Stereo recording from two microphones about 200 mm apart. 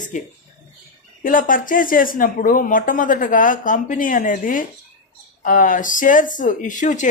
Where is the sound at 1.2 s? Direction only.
45° left (ahead or behind).